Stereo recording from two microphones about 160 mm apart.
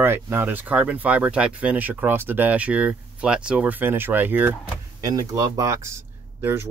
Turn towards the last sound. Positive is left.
turn(degrees=-15)  # may be behind; listen again after turning